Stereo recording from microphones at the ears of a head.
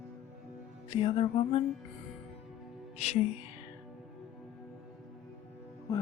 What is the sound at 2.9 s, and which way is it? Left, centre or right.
Music, left.